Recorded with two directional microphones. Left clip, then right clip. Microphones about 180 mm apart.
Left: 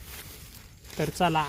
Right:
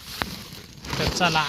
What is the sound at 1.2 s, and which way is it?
Speech, 25° left (ahead or behind).